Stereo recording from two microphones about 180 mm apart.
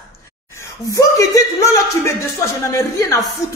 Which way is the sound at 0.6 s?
15° left (ahead or behind).